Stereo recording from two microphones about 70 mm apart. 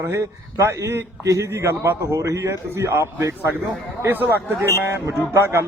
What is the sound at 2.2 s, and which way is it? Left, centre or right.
A man's voice, right.